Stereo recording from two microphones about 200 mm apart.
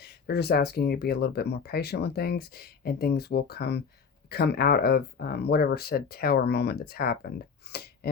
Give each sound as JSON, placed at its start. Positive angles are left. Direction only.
{"t": 0.0, "sound": "speech", "side_deg": 55}